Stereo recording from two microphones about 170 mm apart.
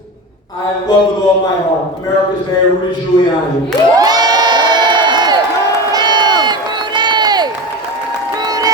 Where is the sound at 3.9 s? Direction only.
25° right (ahead or behind).